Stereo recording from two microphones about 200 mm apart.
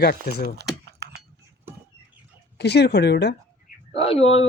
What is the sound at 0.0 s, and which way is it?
Speech, 55° left (ahead or behind).